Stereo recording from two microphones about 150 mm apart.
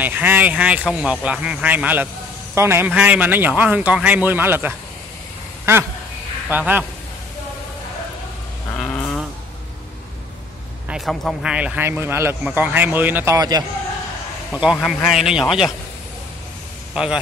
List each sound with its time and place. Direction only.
0.0 s speech: 10° right (ahead or behind)
6.5 s speech: 10° right (ahead or behind)
8.7 s a sound: 5° left (ahead or behind)
10.9 s speech: centre (ahead or behind); by 13.7 s 25° right (ahead or behind)
14.5 s a man's voice: 5° right (ahead or behind)
16.9 s speech: 5° right (ahead or behind)